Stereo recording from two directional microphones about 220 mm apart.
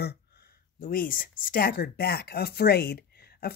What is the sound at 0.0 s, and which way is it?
A woman's voice, 45° left (ahead or behind).